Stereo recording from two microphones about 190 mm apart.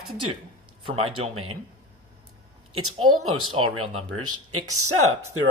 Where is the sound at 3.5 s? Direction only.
25° right (ahead or behind).